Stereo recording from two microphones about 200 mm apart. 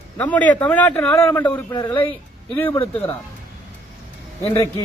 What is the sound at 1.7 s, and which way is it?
Speech, 20° left (ahead or behind).